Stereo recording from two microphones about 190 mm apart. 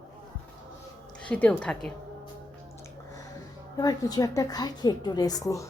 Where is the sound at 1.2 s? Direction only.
5° left (ahead or behind).